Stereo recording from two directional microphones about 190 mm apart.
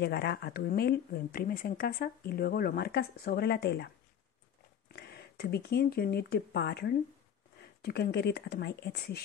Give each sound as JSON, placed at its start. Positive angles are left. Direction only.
{"t": 0.0, "sound": "speech", "side_deg": 55}